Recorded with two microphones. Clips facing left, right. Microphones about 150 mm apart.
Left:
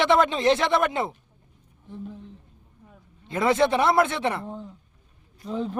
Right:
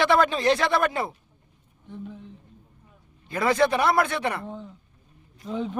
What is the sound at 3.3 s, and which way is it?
Speech, 25° left (ahead or behind).